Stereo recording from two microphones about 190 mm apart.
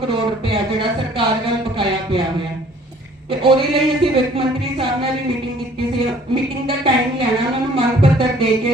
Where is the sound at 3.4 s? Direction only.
30° right (ahead or behind).